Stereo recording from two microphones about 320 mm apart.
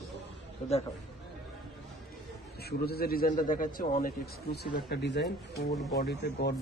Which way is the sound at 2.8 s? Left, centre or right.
Left.